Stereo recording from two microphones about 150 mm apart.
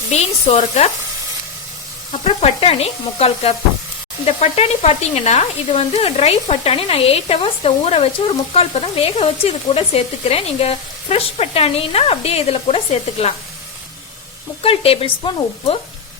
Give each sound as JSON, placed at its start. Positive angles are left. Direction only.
{"t": 0.1, "sound": "speech", "side_deg": 45}
{"t": 2.2, "sound": "speech", "side_deg": 40}
{"t": 14.6, "sound": "speech", "side_deg": 40}